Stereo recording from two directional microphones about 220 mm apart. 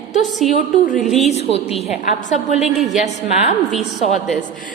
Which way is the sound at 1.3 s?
30° left (ahead or behind).